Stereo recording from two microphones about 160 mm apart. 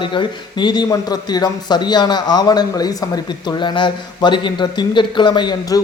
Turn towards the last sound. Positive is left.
turn(degrees=25)  # may be behind; listen again after turning